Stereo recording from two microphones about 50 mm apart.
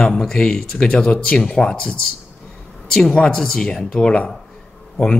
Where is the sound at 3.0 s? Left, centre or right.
Centre.